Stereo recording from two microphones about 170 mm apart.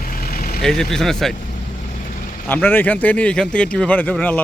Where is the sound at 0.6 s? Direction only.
5° left (ahead or behind).